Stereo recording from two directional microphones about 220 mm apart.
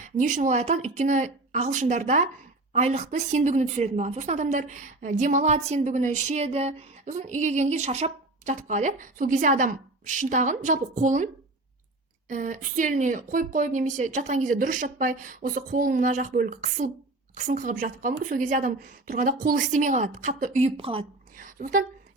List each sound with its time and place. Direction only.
0.2 s speech: 35° right (ahead or behind)
12.3 s speech: 35° right (ahead or behind)
21.3 s a sound: 40° right (ahead or behind)